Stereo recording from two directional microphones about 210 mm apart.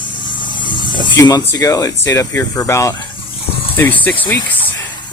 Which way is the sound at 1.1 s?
15° left (ahead or behind).